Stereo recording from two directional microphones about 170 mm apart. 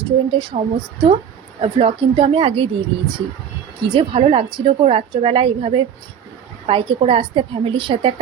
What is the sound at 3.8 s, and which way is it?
A woman's voice, 30° right (ahead or behind).